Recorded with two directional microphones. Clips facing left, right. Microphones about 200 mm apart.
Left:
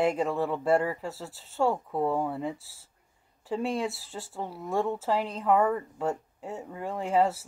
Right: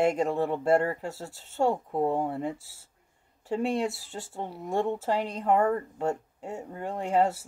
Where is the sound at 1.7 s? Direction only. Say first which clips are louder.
Right 2 dB; 20° right (ahead or behind).